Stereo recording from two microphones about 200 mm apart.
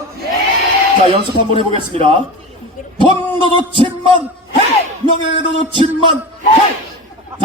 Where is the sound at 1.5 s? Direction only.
30° right (ahead or behind).